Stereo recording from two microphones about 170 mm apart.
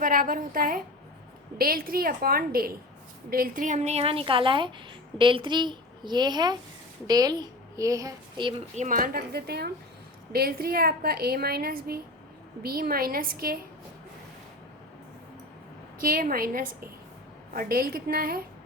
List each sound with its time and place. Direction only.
0.0 s a woman's voice: 55° right (ahead or behind); by 8.6 s 30° right (ahead or behind)
8.7 s a woman's voice: 45° right (ahead or behind); by 13.6 s 60° right (ahead or behind)
16.0 s a woman's voice: 55° right (ahead or behind)